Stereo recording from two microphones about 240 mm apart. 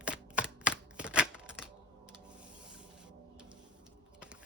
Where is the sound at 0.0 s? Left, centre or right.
Centre.